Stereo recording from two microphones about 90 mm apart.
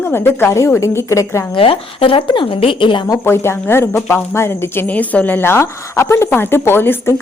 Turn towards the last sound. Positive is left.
turn(degrees=25)  # may be behind; listen again after turning